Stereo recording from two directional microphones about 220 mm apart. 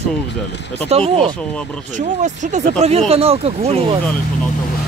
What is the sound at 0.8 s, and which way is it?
Speech, 25° right (ahead or behind).